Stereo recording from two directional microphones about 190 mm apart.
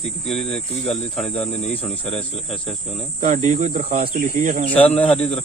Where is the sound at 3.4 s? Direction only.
45° right (ahead or behind).